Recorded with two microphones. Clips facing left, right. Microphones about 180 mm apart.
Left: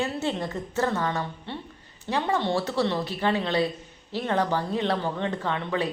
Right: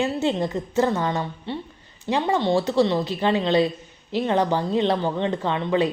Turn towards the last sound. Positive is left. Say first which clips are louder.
# right 6 dB
turn(degrees=-20)  # may be behind; listen again after turning